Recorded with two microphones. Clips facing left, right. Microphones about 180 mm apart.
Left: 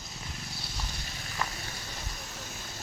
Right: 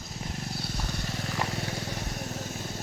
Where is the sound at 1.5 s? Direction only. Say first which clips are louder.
Right 9 dB; 70° right (ahead or behind).